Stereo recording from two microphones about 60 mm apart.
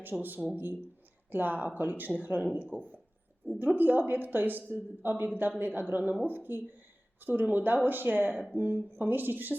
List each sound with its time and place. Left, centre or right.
0.0 s a woman's voice: right
3.4 s speech: left
3.8 s a woman's voice: right
8.3 s speech: centre
8.5 s a woman's voice: right